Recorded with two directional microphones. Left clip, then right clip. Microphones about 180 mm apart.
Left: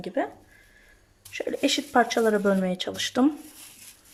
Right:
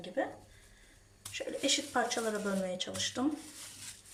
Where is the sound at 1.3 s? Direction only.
50° left (ahead or behind).